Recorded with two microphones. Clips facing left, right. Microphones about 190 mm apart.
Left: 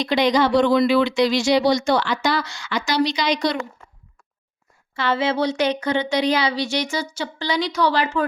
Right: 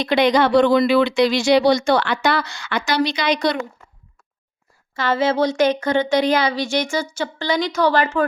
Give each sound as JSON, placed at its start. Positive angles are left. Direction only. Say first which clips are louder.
{"t": 0.0, "sound": "speech", "louder": "right 2 dB", "side_deg": -60}
{"t": 4.9, "sound": "speech", "louder": "right 3 dB", "side_deg": -45}